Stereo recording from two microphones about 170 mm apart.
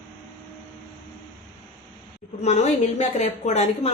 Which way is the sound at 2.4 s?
40° left (ahead or behind).